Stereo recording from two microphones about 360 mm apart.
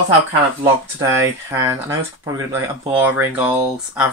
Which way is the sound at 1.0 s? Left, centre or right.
Centre.